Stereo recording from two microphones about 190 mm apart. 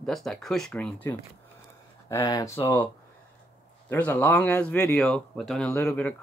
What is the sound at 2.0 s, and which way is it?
Speech, 15° left (ahead or behind).